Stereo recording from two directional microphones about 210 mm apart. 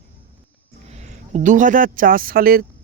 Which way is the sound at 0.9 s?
30° right (ahead or behind).